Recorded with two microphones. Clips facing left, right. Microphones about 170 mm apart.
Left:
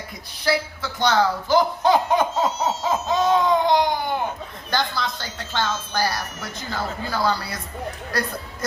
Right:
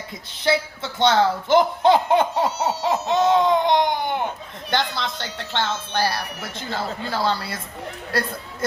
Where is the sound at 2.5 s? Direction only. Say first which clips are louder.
Right 1 dB; 65° right (ahead or behind).